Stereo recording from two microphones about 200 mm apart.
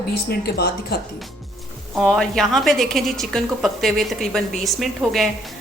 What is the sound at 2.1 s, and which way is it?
A woman's voice, centre (ahead or behind).